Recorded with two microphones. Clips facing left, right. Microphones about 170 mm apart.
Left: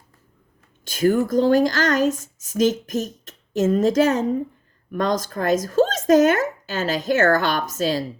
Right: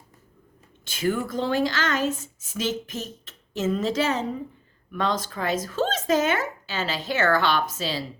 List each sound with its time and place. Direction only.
0.9 s speech: 45° left (ahead or behind)